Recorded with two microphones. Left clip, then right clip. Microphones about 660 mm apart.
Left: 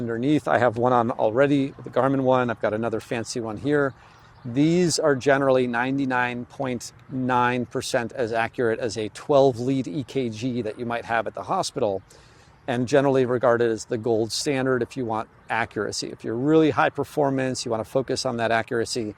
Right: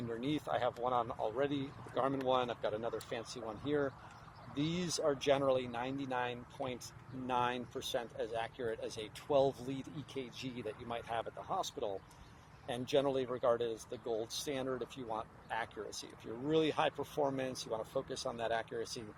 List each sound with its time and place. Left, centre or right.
0.2 s speech: left